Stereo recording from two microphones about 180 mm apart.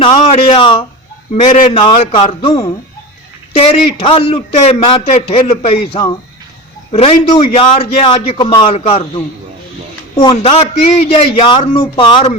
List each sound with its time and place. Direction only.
0.0 s a man's voice: 35° left (ahead or behind)
1.3 s a man's voice: 45° left (ahead or behind)
1.7 s a man's voice: 30° left (ahead or behind)
10.3 s a man's voice: 35° left (ahead or behind)